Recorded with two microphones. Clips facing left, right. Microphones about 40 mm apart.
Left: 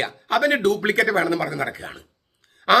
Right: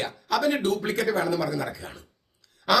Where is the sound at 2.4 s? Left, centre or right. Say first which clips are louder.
Left 6 dB; left.